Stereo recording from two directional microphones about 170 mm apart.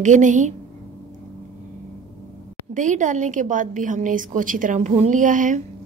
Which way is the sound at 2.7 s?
50° right (ahead or behind).